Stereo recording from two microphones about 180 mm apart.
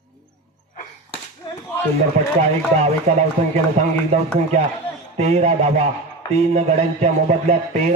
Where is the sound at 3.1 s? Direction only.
40° right (ahead or behind).